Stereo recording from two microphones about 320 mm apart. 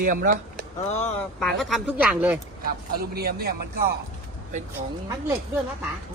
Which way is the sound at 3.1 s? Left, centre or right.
Right.